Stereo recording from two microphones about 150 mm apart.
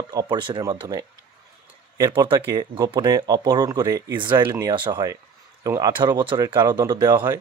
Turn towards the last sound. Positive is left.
turn(degrees=-25)  # may be behind; listen again after turning